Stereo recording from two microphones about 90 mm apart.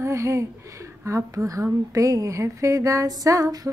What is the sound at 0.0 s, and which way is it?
Speech, 35° right (ahead or behind).